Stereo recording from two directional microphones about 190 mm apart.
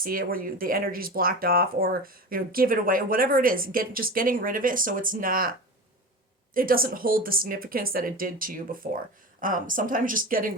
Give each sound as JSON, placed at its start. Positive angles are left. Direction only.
{"t": 0.0, "sound": "speech", "side_deg": -50}